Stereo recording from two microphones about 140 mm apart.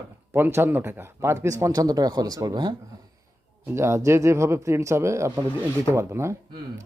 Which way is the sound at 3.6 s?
20° right (ahead or behind).